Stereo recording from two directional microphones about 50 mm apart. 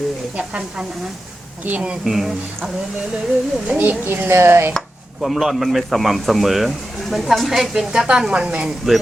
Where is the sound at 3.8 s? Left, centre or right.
Right.